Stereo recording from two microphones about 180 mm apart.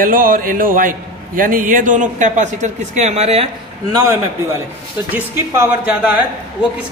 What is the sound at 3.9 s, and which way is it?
Speech, 20° right (ahead or behind).